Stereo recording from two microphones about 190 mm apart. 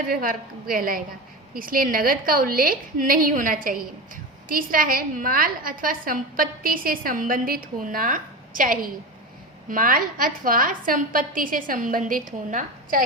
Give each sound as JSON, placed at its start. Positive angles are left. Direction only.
{"t": 0.1, "sound": "a woman's voice", "side_deg": -50}